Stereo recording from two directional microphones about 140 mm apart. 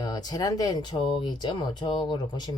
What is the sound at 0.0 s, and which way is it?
Speech, 30° left (ahead or behind).